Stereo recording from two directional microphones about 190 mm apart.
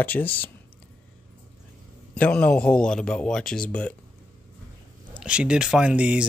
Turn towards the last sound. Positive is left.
turn(degrees=-5)  # may be behind; listen again after turning